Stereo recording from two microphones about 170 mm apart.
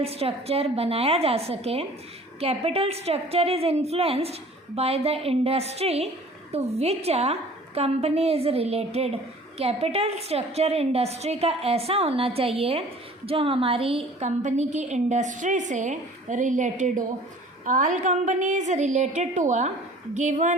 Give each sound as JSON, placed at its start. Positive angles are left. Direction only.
{"t": 0.0, "sound": "a woman's voice", "side_deg": -35}